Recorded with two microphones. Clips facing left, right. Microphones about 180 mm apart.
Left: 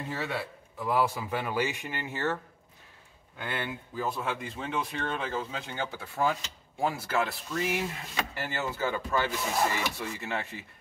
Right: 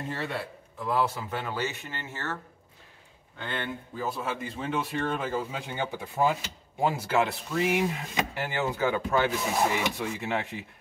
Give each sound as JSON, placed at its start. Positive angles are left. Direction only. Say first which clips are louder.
{"t": 0.1, "sound": "a man's voice", "louder": "left 2 dB", "side_deg": 5}
{"t": 3.3, "sound": "speech", "louder": "right 1 dB", "side_deg": 10}
{"t": 4.0, "sound": "speech", "louder": "even", "side_deg": 0}